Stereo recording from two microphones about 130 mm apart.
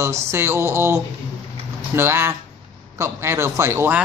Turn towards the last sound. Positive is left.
turn(degrees=-15)  # may be behind; listen again after turning